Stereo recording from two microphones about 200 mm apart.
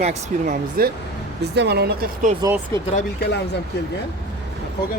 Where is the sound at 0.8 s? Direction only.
50° right (ahead or behind).